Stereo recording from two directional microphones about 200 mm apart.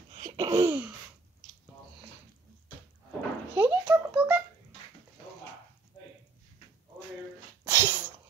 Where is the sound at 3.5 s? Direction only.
10° right (ahead or behind).